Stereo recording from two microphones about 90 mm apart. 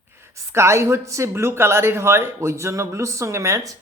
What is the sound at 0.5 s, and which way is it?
Speech, 30° right (ahead or behind).